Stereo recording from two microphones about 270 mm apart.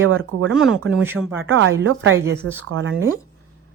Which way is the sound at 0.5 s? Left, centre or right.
Centre.